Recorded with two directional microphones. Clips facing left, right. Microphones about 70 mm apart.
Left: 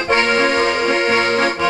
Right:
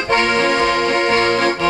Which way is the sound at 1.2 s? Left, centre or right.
Left.